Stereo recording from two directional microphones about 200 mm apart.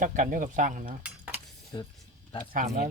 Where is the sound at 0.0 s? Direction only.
40° right (ahead or behind).